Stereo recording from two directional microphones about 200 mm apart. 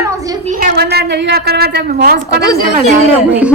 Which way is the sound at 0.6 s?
55° right (ahead or behind).